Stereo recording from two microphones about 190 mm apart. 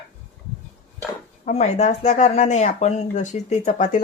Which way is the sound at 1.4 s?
35° left (ahead or behind).